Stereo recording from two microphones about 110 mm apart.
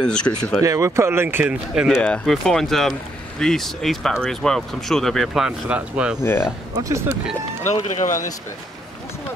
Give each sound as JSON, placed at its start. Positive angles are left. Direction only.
{"t": 0.0, "sound": "speech", "side_deg": 5}
{"t": 0.6, "sound": "speech", "side_deg": -30}
{"t": 2.0, "sound": "speech", "side_deg": 10}
{"t": 6.2, "sound": "speech", "side_deg": 20}
{"t": 6.7, "sound": "speech", "side_deg": -30}
{"t": 7.7, "sound": "speech", "side_deg": 80}